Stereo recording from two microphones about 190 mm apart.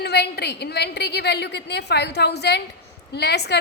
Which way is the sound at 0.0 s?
60° left (ahead or behind).